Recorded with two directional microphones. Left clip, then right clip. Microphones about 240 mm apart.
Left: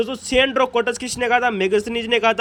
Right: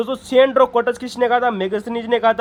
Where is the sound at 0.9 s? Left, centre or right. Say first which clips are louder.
Right 2 dB; left.